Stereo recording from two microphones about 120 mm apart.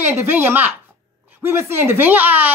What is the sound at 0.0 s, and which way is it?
Speech, 20° right (ahead or behind).